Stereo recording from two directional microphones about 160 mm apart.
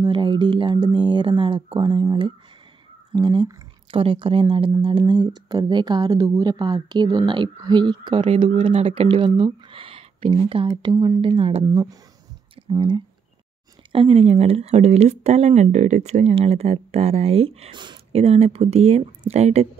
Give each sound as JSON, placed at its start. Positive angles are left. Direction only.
{"t": 0.0, "sound": "speech", "side_deg": -30}